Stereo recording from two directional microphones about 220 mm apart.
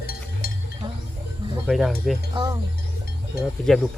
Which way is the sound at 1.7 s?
Centre (ahead or behind).